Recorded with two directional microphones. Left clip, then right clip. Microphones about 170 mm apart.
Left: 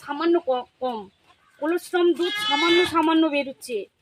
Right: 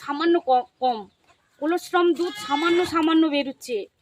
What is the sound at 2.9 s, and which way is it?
Speech, 10° right (ahead or behind).